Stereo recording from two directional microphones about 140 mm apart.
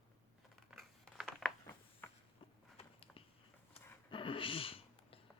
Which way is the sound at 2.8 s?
45° left (ahead or behind).